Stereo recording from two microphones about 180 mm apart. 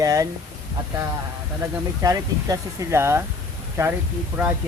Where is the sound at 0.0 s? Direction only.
15° right (ahead or behind).